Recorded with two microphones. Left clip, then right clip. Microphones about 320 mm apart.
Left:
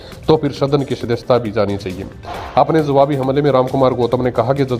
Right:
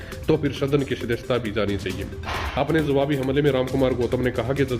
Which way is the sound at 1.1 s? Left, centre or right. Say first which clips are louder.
Left 11 dB; centre.